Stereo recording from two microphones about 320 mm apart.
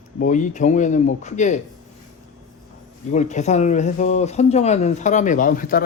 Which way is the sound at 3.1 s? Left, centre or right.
Left.